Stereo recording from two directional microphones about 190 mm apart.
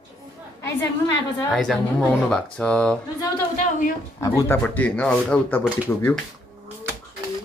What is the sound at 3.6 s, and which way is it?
Speech, 40° left (ahead or behind).